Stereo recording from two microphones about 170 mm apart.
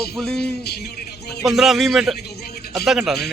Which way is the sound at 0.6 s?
70° left (ahead or behind).